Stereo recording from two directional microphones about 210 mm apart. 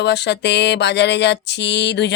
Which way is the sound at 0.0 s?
55° left (ahead or behind).